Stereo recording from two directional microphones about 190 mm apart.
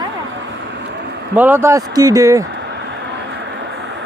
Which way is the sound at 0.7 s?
65° right (ahead or behind).